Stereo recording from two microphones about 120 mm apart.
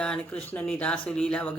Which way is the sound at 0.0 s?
10° left (ahead or behind).